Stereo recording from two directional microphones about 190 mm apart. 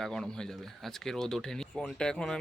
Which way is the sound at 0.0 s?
Centre (ahead or behind).